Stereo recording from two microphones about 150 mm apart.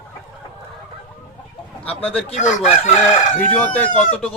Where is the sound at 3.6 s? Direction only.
10° left (ahead or behind).